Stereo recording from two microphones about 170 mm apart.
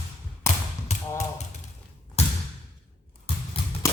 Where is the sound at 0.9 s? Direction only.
40° left (ahead or behind).